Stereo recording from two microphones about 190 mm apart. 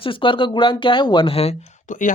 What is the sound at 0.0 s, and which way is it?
Speech, 25° left (ahead or behind).